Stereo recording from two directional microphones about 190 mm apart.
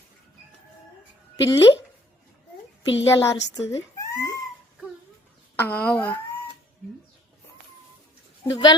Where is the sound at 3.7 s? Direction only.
15° left (ahead or behind).